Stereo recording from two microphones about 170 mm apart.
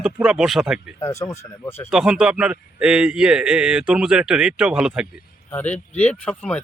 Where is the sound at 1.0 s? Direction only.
15° left (ahead or behind).